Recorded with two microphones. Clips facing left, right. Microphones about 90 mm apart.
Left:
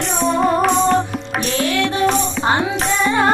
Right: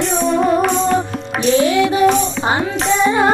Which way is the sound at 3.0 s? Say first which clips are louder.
Right 2 dB; 15° right (ahead or behind).